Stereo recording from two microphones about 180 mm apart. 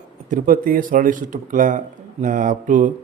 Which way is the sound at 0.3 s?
50° right (ahead or behind).